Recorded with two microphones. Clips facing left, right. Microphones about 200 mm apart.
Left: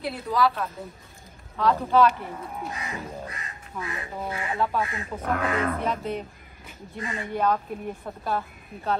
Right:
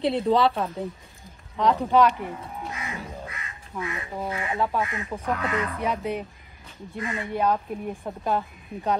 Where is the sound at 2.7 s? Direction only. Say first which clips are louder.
Left 1 dB; 30° left (ahead or behind).